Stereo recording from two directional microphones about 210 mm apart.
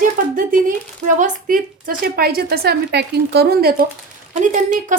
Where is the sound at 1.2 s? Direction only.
40° right (ahead or behind).